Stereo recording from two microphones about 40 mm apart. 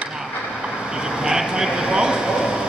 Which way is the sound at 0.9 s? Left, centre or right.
Centre.